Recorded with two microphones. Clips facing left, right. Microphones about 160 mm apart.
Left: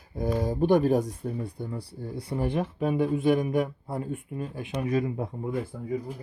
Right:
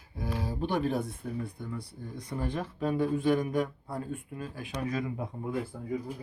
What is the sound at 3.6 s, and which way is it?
Speech, 20° left (ahead or behind).